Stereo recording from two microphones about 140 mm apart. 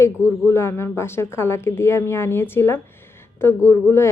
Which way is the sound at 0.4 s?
20° left (ahead or behind).